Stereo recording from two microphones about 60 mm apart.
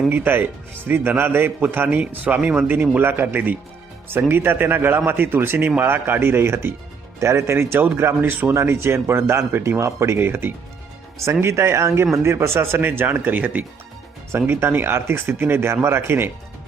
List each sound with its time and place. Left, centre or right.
0.1 s speech: right
2.0 s speech: right
7.2 s speech: right
10.2 s speech: right
11.3 s speech: right
14.3 s speech: right